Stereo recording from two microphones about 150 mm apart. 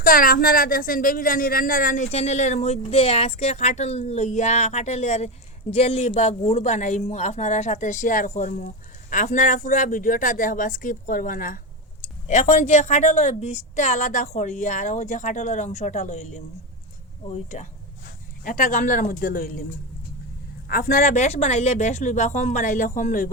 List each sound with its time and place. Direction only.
0.0 s speech: 70° left (ahead or behind)
12.3 s speech: 50° left (ahead or behind)
18.4 s speech: 60° left (ahead or behind)
20.7 s speech: 70° left (ahead or behind)